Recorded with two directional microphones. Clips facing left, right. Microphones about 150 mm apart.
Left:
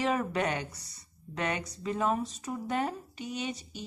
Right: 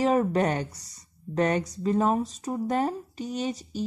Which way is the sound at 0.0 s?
40° right (ahead or behind).